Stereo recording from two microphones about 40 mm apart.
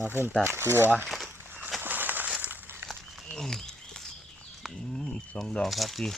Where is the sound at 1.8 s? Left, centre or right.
Right.